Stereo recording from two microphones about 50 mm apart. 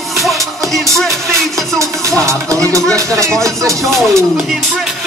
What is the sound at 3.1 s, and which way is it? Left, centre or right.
Speech, right.